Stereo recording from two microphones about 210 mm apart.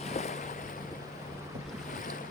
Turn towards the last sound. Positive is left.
turn(degrees=30)  # may be behind; listen again after turning